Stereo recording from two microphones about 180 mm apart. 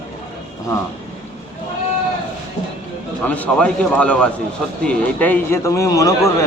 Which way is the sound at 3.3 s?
5° left (ahead or behind).